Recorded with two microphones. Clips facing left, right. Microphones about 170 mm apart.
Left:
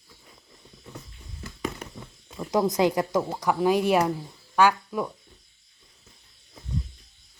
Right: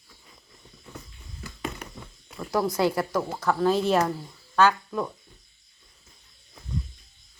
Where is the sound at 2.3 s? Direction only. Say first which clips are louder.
Left 2 dB; 20° left (ahead or behind).